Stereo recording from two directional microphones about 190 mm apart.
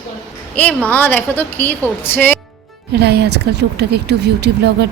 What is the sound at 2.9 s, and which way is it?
Speech, 60° right (ahead or behind).